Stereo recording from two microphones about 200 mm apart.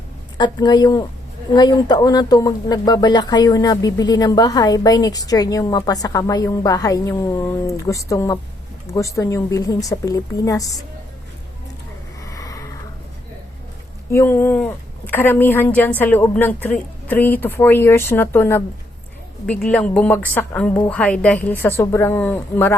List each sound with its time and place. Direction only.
0.3 s a woman's voice: 20° left (ahead or behind)
12.2 s a sound: 15° left (ahead or behind)
14.1 s a woman's voice: 10° left (ahead or behind)